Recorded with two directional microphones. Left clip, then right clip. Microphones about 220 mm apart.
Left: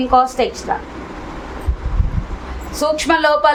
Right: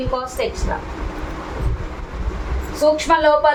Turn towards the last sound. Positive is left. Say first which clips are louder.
# left 1 dB
turn(degrees=50)  # may be behind; listen again after turning